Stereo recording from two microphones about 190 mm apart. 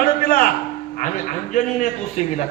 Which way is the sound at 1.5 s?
40° left (ahead or behind).